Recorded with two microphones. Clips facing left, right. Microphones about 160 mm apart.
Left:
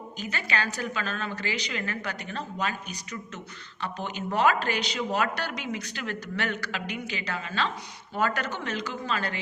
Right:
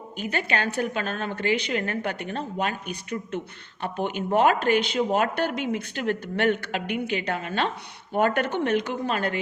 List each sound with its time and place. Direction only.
0.2 s a woman's voice: 55° right (ahead or behind)